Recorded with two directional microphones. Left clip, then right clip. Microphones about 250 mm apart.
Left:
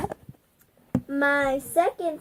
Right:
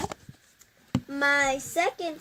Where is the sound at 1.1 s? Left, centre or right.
Right.